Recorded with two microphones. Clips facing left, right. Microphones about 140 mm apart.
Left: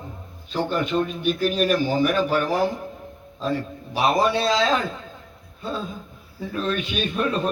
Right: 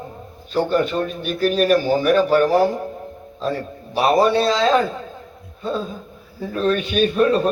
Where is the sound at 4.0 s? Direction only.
40° right (ahead or behind).